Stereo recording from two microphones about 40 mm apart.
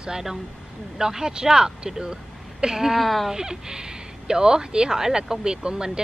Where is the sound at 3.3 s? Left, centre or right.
Centre.